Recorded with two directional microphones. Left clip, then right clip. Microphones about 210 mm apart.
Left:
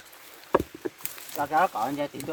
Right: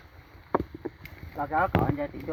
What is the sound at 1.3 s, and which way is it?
Speech, 5° right (ahead or behind).